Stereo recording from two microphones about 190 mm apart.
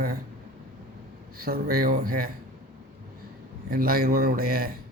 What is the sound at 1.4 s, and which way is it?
Speech, 50° right (ahead or behind).